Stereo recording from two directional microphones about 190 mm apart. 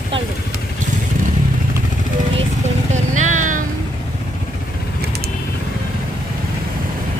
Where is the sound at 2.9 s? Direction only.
40° right (ahead or behind).